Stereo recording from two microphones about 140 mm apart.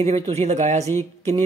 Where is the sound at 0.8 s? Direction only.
20° left (ahead or behind).